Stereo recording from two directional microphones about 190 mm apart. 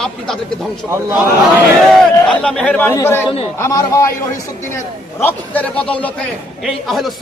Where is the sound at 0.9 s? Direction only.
15° right (ahead or behind).